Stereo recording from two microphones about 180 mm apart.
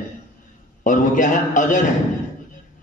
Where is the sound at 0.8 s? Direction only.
45° left (ahead or behind).